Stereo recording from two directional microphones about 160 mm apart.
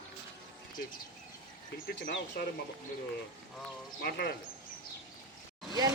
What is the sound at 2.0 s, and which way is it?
Speech, 80° left.